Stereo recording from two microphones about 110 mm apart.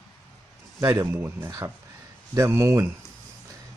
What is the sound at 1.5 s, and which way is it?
Speech, 35° right (ahead or behind).